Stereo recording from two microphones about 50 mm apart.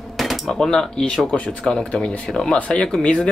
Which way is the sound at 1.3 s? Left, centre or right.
Left.